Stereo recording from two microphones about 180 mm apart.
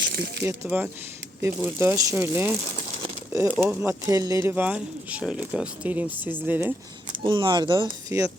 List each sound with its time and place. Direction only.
0.1 s speech: 60° right (ahead or behind)
0.4 s speech: 10° right (ahead or behind)
7.2 s speech: 25° right (ahead or behind)
8.1 s speech: 15° right (ahead or behind)